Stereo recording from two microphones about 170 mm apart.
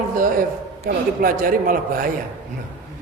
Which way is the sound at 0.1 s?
55° right (ahead or behind).